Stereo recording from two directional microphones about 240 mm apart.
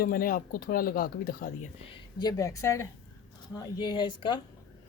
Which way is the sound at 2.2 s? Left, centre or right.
Centre.